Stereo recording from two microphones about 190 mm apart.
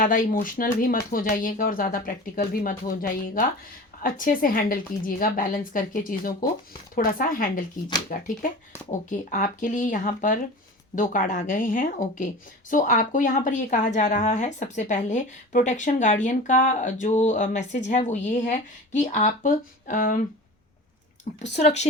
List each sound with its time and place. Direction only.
0.0 s speech: 45° left (ahead or behind)
21.3 s speech: 45° left (ahead or behind)